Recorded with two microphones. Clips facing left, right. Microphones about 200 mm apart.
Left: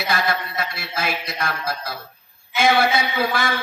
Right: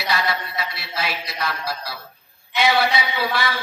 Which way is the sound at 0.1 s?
50° left (ahead or behind).